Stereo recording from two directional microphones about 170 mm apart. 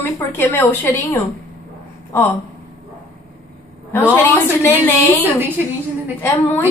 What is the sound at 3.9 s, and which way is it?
Speech, 15° left (ahead or behind).